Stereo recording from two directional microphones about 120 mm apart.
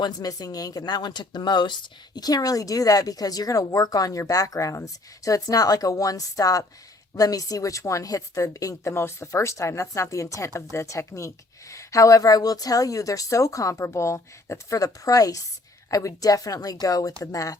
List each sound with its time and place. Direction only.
0.0 s a woman's voice: 30° left (ahead or behind)